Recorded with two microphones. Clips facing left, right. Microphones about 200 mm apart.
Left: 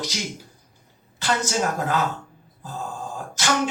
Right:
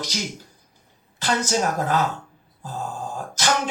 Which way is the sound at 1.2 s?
40° right (ahead or behind).